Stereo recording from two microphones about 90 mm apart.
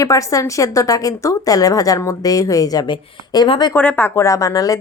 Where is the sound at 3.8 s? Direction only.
20° left (ahead or behind); by 4.8 s 35° left (ahead or behind).